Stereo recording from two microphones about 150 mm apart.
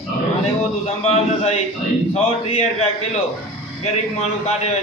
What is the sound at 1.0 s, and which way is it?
A man's voice, 45° left (ahead or behind).